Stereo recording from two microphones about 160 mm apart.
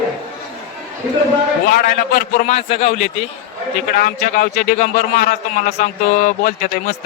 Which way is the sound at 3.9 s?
60° left (ahead or behind).